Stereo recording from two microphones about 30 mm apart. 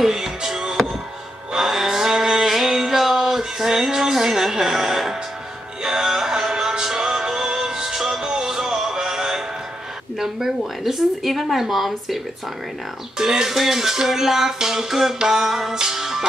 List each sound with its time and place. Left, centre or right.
0.0 s music: centre
10.1 s speech: centre
13.2 s speech: centre
13.6 s a sound: centre